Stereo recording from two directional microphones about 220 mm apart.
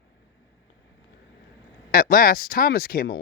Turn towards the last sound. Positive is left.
turn(degrees=40)  # may be behind; listen again after turning